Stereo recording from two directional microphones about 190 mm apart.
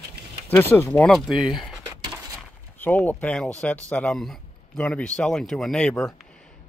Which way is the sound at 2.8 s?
10° left (ahead or behind).